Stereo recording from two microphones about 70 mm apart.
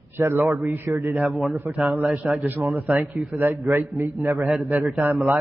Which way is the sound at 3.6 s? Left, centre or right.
Right.